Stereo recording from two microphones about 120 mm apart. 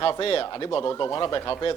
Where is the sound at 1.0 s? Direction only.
25° left (ahead or behind).